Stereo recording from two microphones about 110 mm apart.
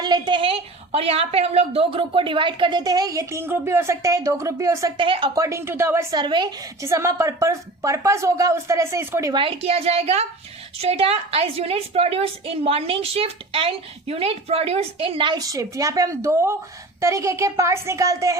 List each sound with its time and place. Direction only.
0.0 s a woman's voice: 45° right (ahead or behind); by 4.9 s 30° right (ahead or behind)
4.9 s a woman's voice: 50° right (ahead or behind)
5.3 s a woman's voice: 30° right (ahead or behind)
6.1 s a woman's voice: 45° right (ahead or behind)
6.8 s a woman's voice: 30° right (ahead or behind)
9.3 s a child's voice: 50° right (ahead or behind)
15.4 s a woman's voice: 30° right (ahead or behind)